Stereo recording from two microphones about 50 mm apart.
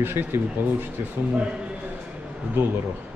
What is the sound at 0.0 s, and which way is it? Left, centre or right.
Speech, right.